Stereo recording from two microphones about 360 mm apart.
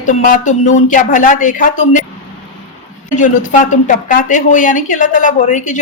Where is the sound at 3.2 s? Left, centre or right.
Left.